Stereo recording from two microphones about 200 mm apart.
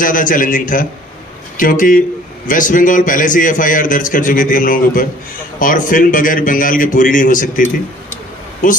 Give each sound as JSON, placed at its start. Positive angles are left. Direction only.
{"t": 0.0, "sound": "a man's voice", "side_deg": 40}